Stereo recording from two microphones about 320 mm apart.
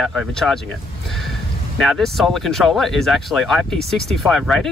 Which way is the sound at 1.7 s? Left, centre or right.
Centre.